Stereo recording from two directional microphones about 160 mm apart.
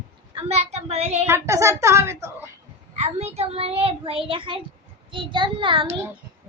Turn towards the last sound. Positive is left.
turn(degrees=-30)  # may be behind; listen again after turning